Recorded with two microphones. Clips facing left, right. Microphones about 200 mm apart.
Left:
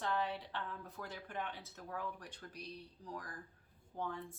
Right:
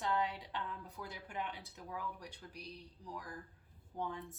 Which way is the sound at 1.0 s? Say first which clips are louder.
Even; 15° right (ahead or behind).